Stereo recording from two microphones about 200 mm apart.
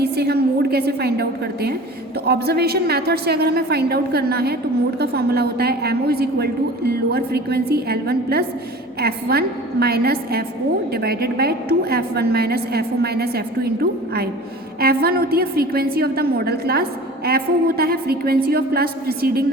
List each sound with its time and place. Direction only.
0.0 s a woman's voice: 55° right (ahead or behind)
14.8 s a woman's voice: 50° right (ahead or behind)